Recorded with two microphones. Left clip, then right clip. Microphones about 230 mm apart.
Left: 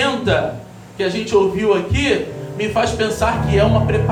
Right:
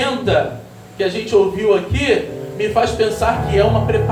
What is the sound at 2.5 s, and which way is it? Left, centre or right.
Speech, left.